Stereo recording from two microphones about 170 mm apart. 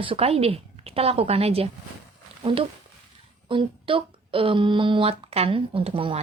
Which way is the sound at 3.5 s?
30° right (ahead or behind).